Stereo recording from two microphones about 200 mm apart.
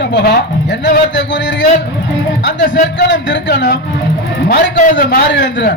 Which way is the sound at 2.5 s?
40° left (ahead or behind).